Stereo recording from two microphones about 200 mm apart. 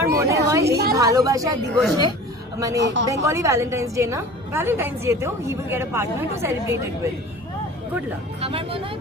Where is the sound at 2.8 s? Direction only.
65° right (ahead or behind).